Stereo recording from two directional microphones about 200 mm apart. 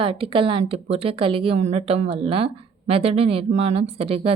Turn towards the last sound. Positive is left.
turn(degrees=-30)  # may be behind; listen again after turning